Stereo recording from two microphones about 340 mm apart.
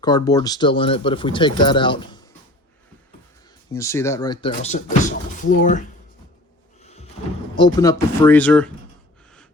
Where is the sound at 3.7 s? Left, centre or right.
Centre.